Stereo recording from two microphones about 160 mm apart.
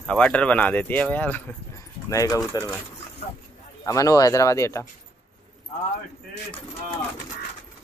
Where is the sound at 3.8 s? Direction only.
20° left (ahead or behind).